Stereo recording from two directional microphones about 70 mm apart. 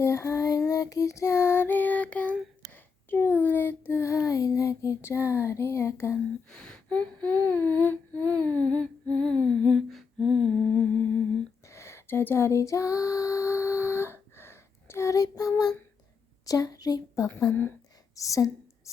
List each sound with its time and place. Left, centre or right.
0.0 s music: left
2.7 s child singing: left
4.0 s child singing: left
5.0 s a sound: left
6.5 s humming: centre
11.7 s female singing: left
16.5 s a woman's voice: left
17.5 s speech: left
18.1 s a woman's voice: left